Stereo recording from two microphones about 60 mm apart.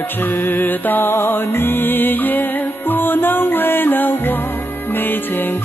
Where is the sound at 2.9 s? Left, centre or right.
Left.